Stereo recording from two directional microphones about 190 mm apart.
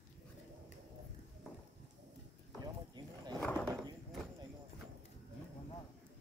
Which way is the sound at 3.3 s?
5° left (ahead or behind).